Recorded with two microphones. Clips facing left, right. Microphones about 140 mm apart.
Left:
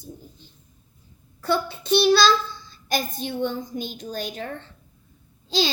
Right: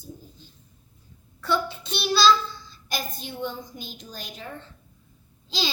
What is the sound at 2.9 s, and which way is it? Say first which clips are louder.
A woman's voice: left 7 dB; 60° left (ahead or behind).